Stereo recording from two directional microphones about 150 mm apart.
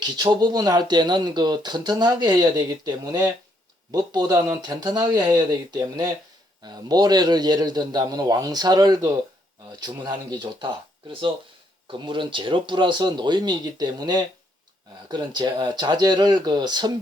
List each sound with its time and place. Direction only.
0.0 s speech: 30° right (ahead or behind)
11.9 s speech: 35° right (ahead or behind)